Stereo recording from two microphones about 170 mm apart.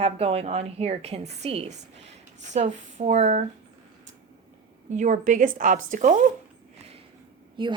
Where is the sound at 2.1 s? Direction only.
40° right (ahead or behind).